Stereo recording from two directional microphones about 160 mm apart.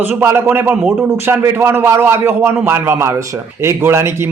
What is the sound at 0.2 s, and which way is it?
A man's voice, 15° right (ahead or behind).